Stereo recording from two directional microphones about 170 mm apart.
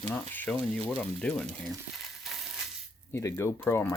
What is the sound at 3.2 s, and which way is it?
Speech, 15° left (ahead or behind).